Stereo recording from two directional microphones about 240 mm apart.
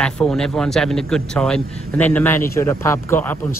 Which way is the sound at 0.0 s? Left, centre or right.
Centre.